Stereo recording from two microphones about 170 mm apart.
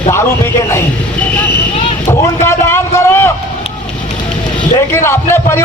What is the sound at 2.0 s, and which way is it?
Vehicle, 15° left (ahead or behind).